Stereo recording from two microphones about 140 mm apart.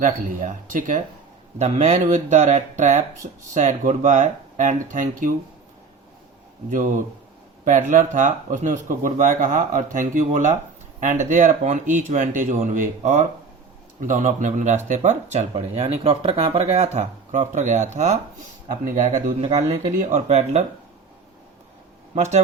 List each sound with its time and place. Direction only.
0.0 s speech: 65° right (ahead or behind)
1.5 s speech: 55° right (ahead or behind)
6.7 s speech: 70° right (ahead or behind)
18.9 s speech: 70° right (ahead or behind)
19.4 s speech: 45° right (ahead or behind)
20.0 s speech: 60° right (ahead or behind)
22.1 s speech: 55° right (ahead or behind)